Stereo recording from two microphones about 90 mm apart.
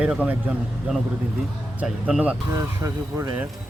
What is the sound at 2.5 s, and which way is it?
Speech, 35° right (ahead or behind).